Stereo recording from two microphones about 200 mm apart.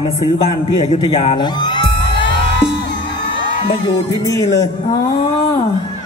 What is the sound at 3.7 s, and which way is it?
Music, 20° left (ahead or behind).